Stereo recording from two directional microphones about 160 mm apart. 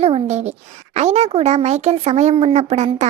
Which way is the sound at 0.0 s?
40° right (ahead or behind).